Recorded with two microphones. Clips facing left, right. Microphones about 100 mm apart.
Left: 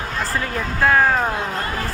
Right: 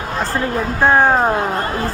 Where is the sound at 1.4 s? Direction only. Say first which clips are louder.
Right 5 dB; 45° right (ahead or behind).